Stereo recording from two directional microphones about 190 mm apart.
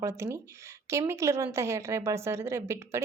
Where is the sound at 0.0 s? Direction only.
15° right (ahead or behind).